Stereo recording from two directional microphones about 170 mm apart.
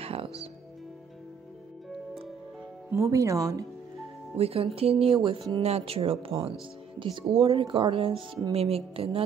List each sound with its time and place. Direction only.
0.0 s music: 35° right (ahead or behind)
2.9 s speech: 20° right (ahead or behind)
4.4 s speech: 35° right (ahead or behind)